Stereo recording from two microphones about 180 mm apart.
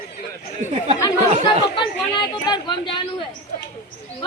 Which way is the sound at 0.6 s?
40° left (ahead or behind).